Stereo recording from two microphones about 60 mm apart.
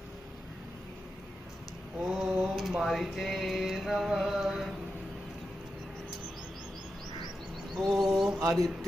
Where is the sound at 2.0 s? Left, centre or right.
Centre.